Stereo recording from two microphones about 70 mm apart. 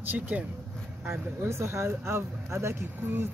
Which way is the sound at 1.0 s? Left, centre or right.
Right.